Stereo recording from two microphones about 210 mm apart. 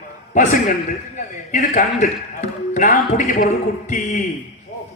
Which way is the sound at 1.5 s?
35° left (ahead or behind).